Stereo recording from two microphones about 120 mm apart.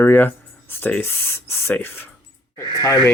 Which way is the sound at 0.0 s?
15° left (ahead or behind).